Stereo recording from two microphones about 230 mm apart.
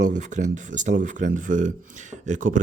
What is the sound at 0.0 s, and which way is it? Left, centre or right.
Speech, right.